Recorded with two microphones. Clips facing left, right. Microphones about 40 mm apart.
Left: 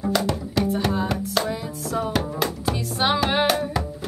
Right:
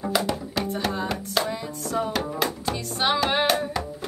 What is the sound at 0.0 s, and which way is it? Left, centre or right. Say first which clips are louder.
Music: left 2 dB; centre.